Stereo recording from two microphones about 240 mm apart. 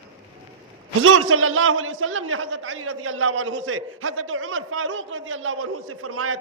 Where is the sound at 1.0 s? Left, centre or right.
Right.